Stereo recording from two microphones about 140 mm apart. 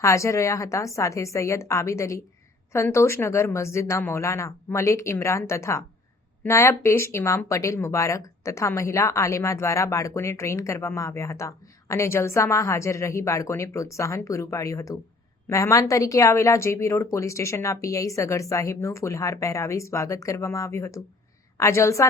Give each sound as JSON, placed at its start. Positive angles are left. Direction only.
{"t": 0.0, "sound": "speech", "side_deg": 20}